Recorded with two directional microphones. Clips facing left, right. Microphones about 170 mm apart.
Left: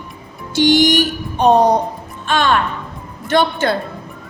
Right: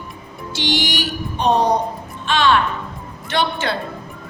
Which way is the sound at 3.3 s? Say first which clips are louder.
Left 5 dB; 45° left (ahead or behind).